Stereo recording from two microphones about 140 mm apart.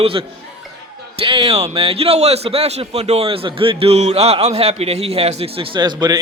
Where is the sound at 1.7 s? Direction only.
45° right (ahead or behind).